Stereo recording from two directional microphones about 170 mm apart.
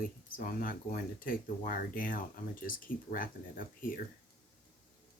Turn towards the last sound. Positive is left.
turn(degrees=55)  # may be behind; listen again after turning